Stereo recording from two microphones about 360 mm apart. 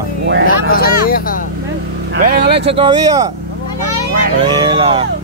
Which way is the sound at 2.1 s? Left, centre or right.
Right.